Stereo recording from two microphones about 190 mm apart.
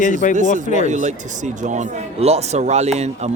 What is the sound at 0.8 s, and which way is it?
Speech, 40° right (ahead or behind).